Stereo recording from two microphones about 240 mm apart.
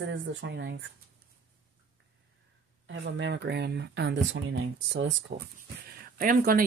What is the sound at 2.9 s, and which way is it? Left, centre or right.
Speech, right.